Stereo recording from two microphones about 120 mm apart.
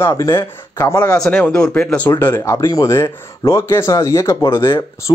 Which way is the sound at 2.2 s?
25° left (ahead or behind).